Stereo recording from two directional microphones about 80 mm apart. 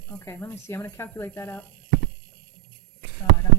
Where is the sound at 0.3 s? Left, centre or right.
Left.